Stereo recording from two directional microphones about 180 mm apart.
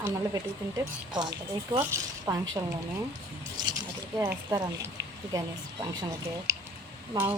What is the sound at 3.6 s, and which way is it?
A woman's voice, 25° right (ahead or behind).